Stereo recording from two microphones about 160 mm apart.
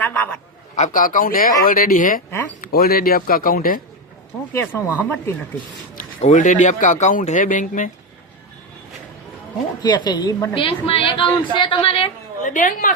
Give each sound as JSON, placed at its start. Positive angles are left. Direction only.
{"t": 0.0, "sound": "a sound", "side_deg": 10}
{"t": 0.8, "sound": "speech", "side_deg": 55}
{"t": 2.6, "sound": "speech", "side_deg": 70}
{"t": 4.5, "sound": "speech", "side_deg": 10}
{"t": 6.1, "sound": "speech", "side_deg": 50}
{"t": 9.8, "sound": "a woman's voice", "side_deg": 25}
{"t": 10.6, "sound": "a woman's voice", "side_deg": 35}
{"t": 12.4, "sound": "speech", "side_deg": 55}